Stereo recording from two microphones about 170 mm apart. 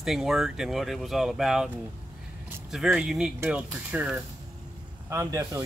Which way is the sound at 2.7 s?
5° right (ahead or behind).